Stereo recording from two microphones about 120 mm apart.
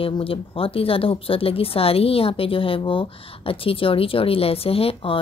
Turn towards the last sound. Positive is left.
turn(degrees=55)  # may be behind; listen again after turning